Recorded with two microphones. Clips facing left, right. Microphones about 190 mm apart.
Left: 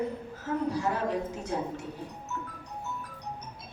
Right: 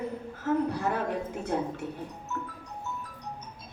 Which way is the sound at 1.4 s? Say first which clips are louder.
Right 2 dB; 55° right (ahead or behind).